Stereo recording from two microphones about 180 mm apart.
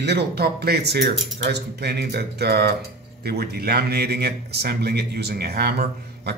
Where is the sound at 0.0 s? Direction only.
65° right (ahead or behind).